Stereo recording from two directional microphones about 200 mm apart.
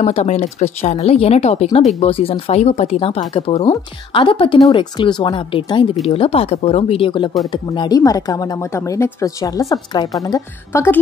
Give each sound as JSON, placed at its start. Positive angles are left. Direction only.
{"t": 0.0, "sound": "speech", "side_deg": 35}